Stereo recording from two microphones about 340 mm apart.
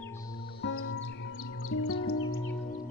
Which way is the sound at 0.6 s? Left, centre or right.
Left.